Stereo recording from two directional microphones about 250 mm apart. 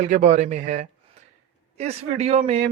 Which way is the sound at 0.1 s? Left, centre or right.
Right.